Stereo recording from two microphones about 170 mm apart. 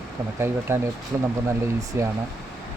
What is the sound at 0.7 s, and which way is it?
Speech, 15° right (ahead or behind).